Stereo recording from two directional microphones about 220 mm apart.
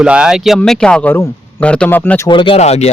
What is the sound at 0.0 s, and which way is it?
Speech, 5° right (ahead or behind).